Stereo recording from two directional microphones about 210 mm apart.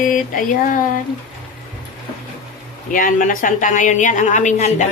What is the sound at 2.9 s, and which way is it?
A woman's voice, 40° left (ahead or behind).